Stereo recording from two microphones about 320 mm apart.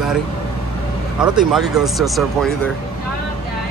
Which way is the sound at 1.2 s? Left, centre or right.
Centre.